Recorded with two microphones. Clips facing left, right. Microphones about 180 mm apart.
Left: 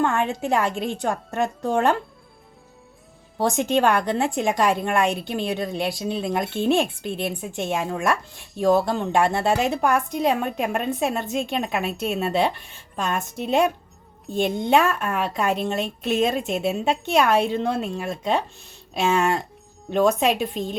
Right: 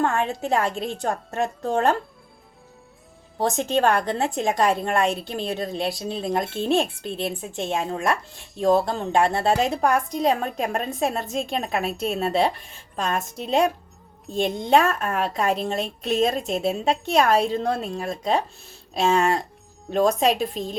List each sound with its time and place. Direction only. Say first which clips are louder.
0.1 s a woman's voice: left 1 dB; centre (ahead or behind)
3.3 s a woman's voice: left 2 dB; centre (ahead or behind)
7.7 s speech: even; 30° right (ahead or behind)
8.0 s a woman's voice: left 1 dB; centre (ahead or behind)